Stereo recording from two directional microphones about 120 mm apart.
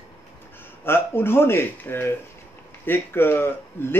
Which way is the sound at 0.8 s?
20° left (ahead or behind).